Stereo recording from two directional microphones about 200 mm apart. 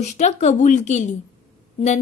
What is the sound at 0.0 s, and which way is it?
A woman's voice, 35° left (ahead or behind).